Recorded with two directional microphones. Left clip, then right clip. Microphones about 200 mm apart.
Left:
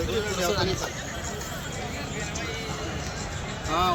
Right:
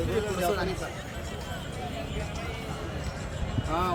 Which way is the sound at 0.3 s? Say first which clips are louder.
Left 2 dB; 30° right (ahead or behind).